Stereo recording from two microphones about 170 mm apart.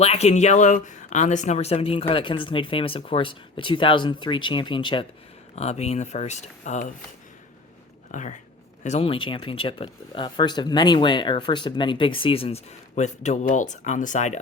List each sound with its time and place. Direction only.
0.0 s speech: 40° left (ahead or behind)
5.5 s speech: 40° left (ahead or behind)
8.1 s speech: 45° left (ahead or behind)